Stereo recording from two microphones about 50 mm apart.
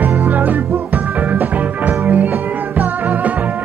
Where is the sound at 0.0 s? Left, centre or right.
Right.